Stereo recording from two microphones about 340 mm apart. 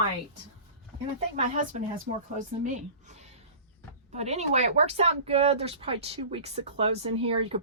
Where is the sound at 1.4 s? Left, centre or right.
Right.